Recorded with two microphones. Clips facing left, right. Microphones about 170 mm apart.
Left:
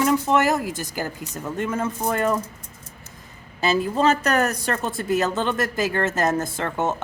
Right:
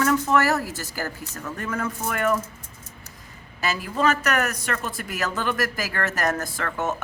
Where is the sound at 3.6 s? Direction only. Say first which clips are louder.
Left 4 dB; 25° left (ahead or behind).